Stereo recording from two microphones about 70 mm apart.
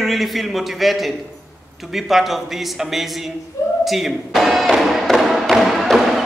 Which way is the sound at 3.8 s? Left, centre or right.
Centre.